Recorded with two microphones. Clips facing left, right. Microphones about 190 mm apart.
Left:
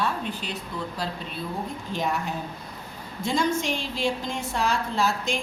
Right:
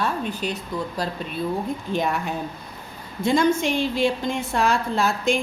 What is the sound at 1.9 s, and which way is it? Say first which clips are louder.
Speech: right 3 dB; 55° right (ahead or behind).